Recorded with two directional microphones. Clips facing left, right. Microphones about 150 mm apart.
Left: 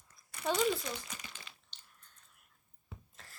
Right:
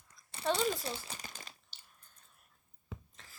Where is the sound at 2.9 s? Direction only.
90° right.